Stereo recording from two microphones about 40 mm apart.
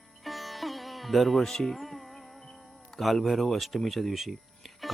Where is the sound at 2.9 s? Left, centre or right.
Centre.